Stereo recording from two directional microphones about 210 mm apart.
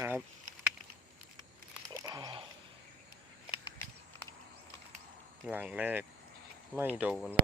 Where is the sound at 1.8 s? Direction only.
20° right (ahead or behind).